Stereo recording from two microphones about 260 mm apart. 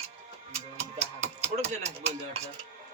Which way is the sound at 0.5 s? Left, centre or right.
Right.